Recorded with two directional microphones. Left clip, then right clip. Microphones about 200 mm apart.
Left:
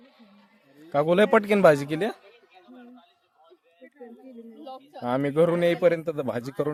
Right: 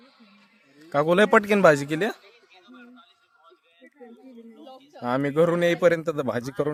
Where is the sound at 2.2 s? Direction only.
25° right (ahead or behind).